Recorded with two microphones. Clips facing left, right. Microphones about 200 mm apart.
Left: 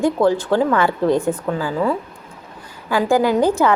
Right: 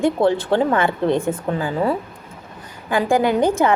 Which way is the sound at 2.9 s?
55° right (ahead or behind).